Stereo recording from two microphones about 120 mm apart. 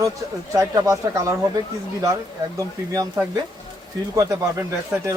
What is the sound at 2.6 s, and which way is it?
Speech, 30° right (ahead or behind).